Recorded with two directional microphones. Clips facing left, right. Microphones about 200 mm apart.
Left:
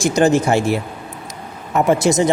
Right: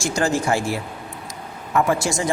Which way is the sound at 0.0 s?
20° left (ahead or behind).